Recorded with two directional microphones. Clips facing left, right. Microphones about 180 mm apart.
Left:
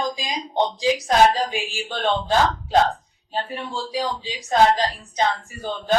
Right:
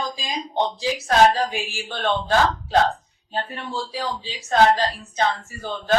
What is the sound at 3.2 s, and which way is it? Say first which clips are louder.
Speech: left 1 dB; 10° left (ahead or behind).